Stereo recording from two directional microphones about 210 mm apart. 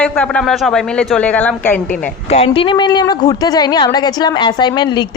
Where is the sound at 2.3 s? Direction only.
30° left (ahead or behind).